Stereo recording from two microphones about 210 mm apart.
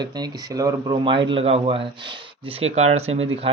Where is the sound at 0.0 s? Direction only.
20° right (ahead or behind).